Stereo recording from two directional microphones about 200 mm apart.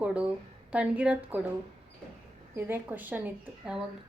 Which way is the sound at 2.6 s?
10° right (ahead or behind).